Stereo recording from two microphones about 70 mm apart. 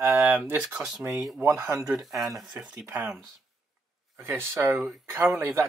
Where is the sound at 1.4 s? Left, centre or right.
Right.